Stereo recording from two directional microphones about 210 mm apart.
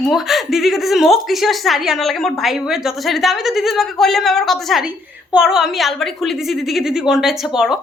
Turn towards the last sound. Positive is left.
turn(degrees=0)  # may be behind; listen again after turning